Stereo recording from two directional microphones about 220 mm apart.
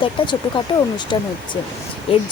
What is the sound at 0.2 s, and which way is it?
Speech, 25° left (ahead or behind).